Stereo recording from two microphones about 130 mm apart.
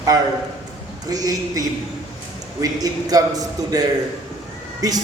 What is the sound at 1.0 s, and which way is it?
A man's voice, 30° right (ahead or behind).